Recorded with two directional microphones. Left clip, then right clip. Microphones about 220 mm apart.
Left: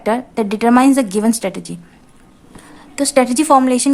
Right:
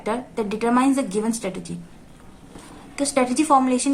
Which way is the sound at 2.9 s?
45° left (ahead or behind).